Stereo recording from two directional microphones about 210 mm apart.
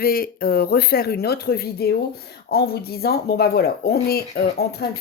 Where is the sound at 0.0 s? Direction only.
45° left (ahead or behind).